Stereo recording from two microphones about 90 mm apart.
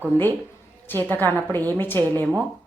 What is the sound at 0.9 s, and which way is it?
Speech, 20° left (ahead or behind).